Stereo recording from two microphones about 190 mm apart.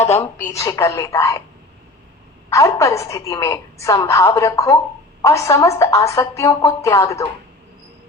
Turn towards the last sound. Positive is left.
turn(degrees=15)  # may be behind; listen again after turning